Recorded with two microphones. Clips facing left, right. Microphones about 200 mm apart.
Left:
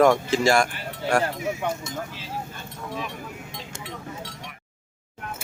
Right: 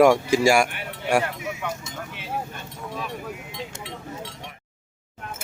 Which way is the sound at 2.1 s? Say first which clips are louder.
Right 2 dB; 60° right (ahead or behind).